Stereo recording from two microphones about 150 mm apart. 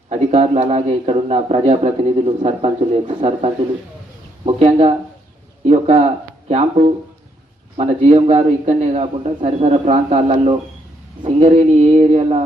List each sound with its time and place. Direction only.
0.1 s a man's voice: 45° right (ahead or behind)